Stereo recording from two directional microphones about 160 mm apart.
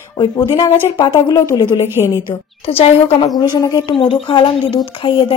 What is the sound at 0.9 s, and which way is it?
Speech, 30° left (ahead or behind).